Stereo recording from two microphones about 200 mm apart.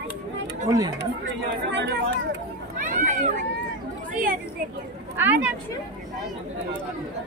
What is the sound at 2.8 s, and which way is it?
Speech, 40° right (ahead or behind).